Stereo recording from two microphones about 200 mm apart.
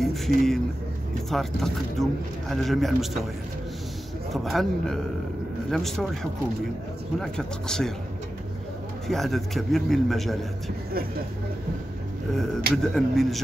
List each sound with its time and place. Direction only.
0.0 s a man's voice: centre (ahead or behind)
4.3 s a man's voice: centre (ahead or behind)
7.2 s a man's voice: 5° left (ahead or behind)
9.0 s a man's voice: centre (ahead or behind)
12.7 s a man's voice: centre (ahead or behind)